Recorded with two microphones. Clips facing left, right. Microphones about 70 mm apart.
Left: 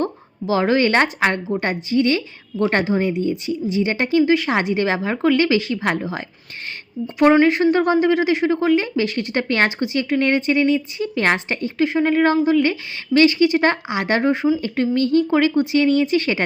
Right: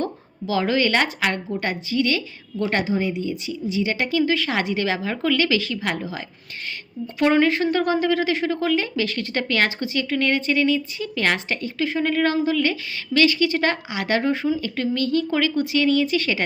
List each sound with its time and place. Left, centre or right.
0.0 s a woman's voice: left
7.4 s a woman's voice: left